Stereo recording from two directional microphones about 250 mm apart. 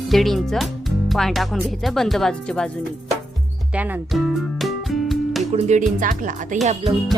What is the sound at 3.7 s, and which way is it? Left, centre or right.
Music, centre.